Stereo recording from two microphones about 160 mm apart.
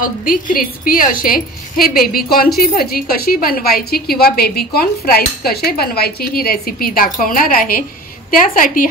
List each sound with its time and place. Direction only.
0.0 s a woman's voice: 60° left (ahead or behind)